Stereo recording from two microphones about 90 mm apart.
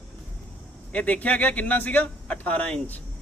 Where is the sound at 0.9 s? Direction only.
15° left (ahead or behind).